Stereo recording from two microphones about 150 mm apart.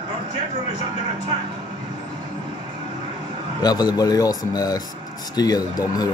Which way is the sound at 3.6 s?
25° left (ahead or behind).